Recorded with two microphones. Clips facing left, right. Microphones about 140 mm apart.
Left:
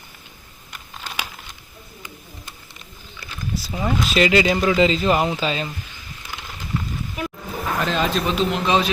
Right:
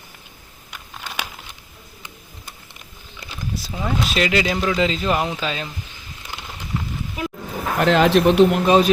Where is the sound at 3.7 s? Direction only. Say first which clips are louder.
Left 2 dB; centre (ahead or behind).